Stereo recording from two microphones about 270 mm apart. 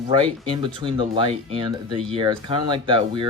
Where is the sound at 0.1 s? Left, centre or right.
Centre.